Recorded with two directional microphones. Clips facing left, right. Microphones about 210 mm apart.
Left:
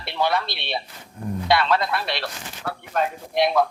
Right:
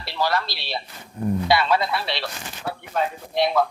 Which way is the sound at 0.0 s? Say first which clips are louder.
Left 1 dB; 20° left (ahead or behind).